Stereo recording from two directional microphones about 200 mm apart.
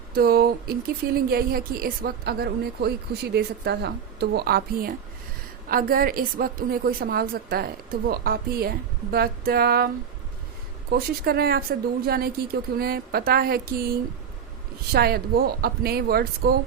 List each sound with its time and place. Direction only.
0.1 s speech: 50° right (ahead or behind)
10.9 s speech: 50° right (ahead or behind)